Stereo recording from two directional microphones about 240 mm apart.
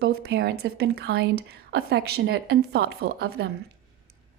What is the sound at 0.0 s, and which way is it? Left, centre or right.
A woman's voice, right.